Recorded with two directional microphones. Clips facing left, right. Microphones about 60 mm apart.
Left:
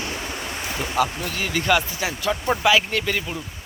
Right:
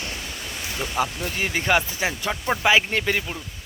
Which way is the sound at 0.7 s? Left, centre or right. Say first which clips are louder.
Left 1 dB; left.